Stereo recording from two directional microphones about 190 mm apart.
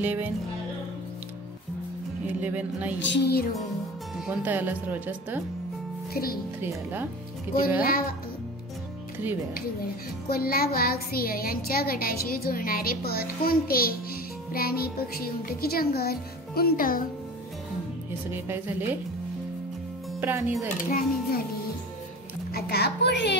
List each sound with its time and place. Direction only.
0.0 s speech: 10° right (ahead or behind)
2.2 s speech: 10° right (ahead or behind)
3.0 s a child's voice: 65° left (ahead or behind)
4.3 s speech: 10° right (ahead or behind)
6.1 s speech: 50° left (ahead or behind)
6.6 s speech: 10° right (ahead or behind)
7.8 s speech: 50° left (ahead or behind)
10.2 s speech: 50° left (ahead or behind)
18.3 s speech: 10° right (ahead or behind)
20.2 s speech: 10° right (ahead or behind)
20.6 s speech: 45° left (ahead or behind)
22.5 s a child's voice: 55° left (ahead or behind)